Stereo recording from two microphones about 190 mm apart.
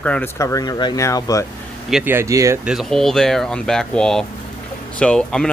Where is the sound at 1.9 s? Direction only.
10° right (ahead or behind).